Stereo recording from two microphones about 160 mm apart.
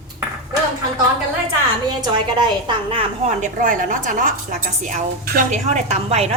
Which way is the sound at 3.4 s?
55° right (ahead or behind).